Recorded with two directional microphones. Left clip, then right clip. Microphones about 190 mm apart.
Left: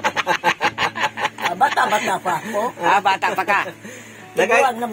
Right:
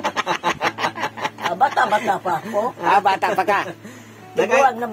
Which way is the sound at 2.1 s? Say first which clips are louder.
Even; centre (ahead or behind).